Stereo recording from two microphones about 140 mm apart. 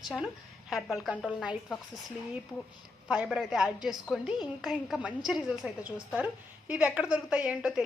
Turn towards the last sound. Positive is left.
turn(degrees=-5)  # may be behind; listen again after turning